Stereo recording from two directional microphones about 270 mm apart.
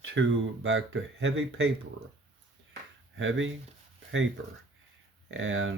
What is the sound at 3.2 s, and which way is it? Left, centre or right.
Speech, right.